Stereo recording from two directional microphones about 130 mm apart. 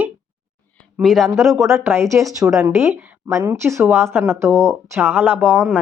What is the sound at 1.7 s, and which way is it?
Speech, 20° right (ahead or behind).